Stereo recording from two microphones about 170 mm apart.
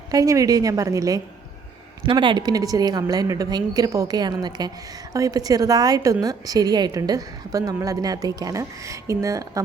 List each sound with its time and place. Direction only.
0.1 s a woman's voice: 20° right (ahead or behind)